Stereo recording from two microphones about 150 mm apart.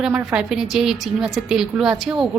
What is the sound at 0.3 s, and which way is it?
A woman's voice, 5° right (ahead or behind).